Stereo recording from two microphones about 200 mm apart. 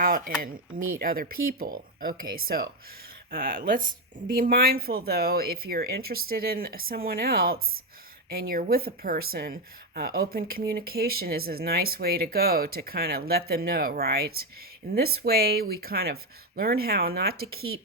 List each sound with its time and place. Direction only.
0.0 s speech: 45° right (ahead or behind)